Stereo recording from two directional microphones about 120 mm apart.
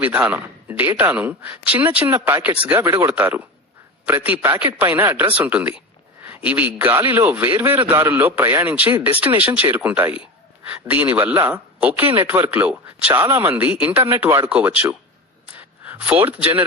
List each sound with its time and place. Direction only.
0.0 s a man's voice: 15° right (ahead or behind)
13.2 s a man's voice: 25° right (ahead or behind)
15.4 s a sound: 15° right (ahead or behind)